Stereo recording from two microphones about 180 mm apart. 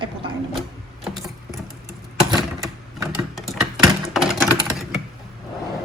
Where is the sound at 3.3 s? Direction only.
Centre (ahead or behind).